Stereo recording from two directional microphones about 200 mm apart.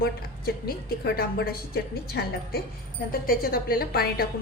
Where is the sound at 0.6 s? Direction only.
50° left (ahead or behind).